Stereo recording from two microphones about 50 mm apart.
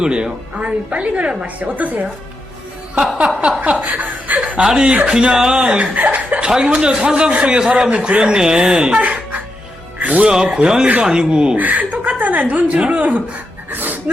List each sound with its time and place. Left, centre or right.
0.0 s a woman's voice: centre
3.6 s speech: right
6.5 s speech: centre
9.0 s music: right
10.0 s speech: right
10.2 s speech: centre
11.5 s speech: right
13.7 s dog: right